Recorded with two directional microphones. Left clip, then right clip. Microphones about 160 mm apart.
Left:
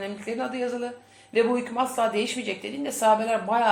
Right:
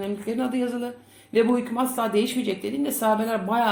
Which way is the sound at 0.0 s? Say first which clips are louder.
Right 2 dB; 35° right (ahead or behind).